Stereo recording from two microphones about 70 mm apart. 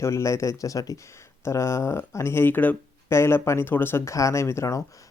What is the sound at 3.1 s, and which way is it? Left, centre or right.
Speech, left.